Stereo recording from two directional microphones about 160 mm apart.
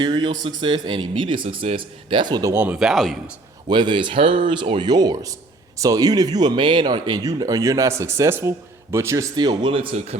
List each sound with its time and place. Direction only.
0.0 s speech: 25° right (ahead or behind)
2.7 s speech: centre (ahead or behind)
3.7 s speech: 30° right (ahead or behind)